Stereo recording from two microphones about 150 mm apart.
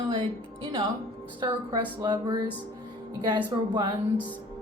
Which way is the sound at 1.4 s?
30° right (ahead or behind).